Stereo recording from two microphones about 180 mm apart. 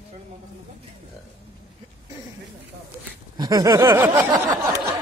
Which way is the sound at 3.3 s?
20° right (ahead or behind).